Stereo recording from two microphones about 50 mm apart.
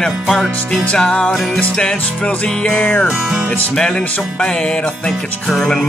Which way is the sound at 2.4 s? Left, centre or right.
Centre.